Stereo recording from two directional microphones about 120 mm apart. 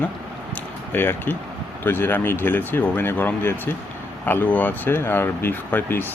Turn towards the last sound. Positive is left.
turn(degrees=15)  # may be behind; listen again after turning